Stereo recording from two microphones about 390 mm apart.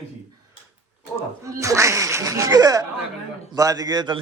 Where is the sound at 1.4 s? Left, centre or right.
Centre.